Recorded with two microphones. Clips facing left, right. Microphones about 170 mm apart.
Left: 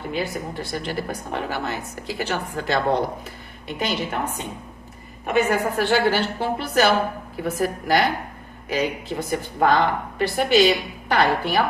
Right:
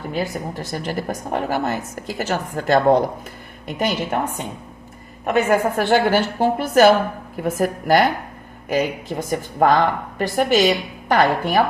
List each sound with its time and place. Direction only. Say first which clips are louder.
0.1 s a woman's voice: right 2 dB; 40° right (ahead or behind)
5.2 s a woman's voice: right 3 dB; 50° right (ahead or behind)